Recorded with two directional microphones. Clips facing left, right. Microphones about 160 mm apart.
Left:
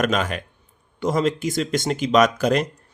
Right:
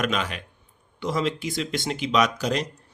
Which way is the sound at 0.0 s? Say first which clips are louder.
Left 5 dB; 45° left (ahead or behind).